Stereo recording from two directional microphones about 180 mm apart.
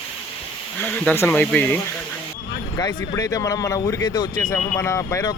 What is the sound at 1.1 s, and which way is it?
Speech, 10° left (ahead or behind).